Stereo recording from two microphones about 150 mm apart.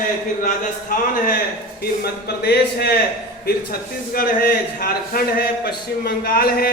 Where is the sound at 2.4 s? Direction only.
90° left.